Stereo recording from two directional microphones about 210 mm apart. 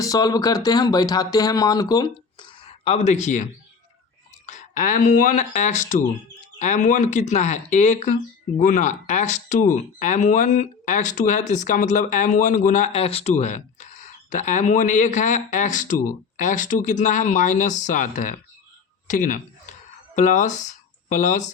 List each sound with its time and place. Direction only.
0.0 s speech: 15° left (ahead or behind); by 18.3 s 35° left (ahead or behind)
19.0 s a sound: 35° left (ahead or behind)
20.1 s speech: 35° left (ahead or behind)